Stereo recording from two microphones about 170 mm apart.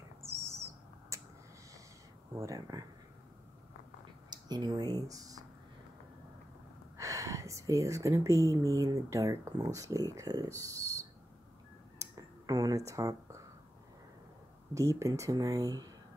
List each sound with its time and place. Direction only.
0.2 s owl: 15° right (ahead or behind)
1.1 s a sound: 15° right (ahead or behind)
2.3 s speech: 20° right (ahead or behind)
4.3 s speech: 25° right (ahead or behind)
7.0 s speech: 20° right (ahead or behind)
12.0 s a sound: 20° right (ahead or behind)
14.7 s speech: 15° right (ahead or behind)